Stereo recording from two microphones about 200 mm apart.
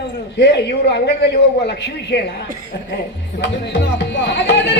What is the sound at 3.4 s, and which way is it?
A woman's voice, 60° left (ahead or behind).